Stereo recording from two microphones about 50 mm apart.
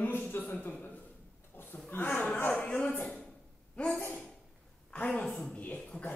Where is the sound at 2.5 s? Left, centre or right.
Centre.